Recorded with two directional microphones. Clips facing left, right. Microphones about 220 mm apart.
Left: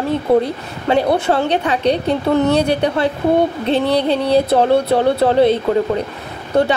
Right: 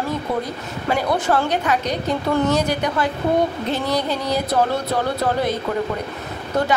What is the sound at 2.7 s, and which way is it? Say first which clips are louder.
Speech: left 5 dB; 30° left (ahead or behind).